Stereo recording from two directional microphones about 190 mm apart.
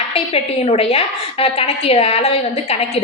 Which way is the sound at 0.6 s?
35° left (ahead or behind).